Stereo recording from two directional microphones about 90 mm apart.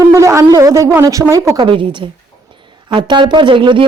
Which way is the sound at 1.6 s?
70° right (ahead or behind).